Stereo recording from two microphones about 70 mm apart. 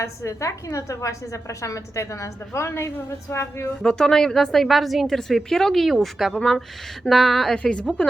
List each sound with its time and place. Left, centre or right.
0.0 s a woman's voice: left
3.8 s a woman's voice: centre